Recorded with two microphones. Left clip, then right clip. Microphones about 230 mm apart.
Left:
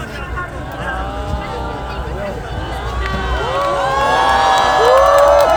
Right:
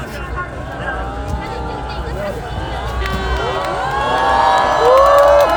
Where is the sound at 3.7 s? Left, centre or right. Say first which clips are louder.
Left 4 dB; left.